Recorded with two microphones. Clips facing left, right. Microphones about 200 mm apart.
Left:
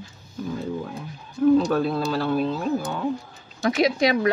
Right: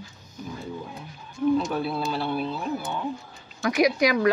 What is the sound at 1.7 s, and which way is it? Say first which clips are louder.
Speech: left 4 dB; 45° left (ahead or behind).